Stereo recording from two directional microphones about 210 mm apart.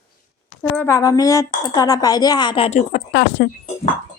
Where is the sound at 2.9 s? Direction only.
50° left (ahead or behind).